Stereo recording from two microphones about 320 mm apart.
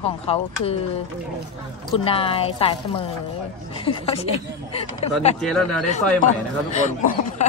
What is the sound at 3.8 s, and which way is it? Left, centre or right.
A woman's voice, centre.